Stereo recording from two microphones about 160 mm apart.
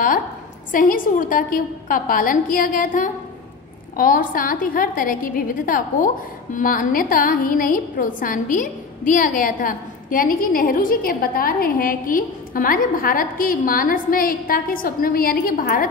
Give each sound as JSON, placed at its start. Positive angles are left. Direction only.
{"t": 0.7, "sound": "a woman's voice", "side_deg": 60}